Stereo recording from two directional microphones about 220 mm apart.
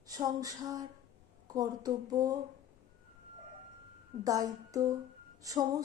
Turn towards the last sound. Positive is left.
turn(degrees=-15)  # may be behind; listen again after turning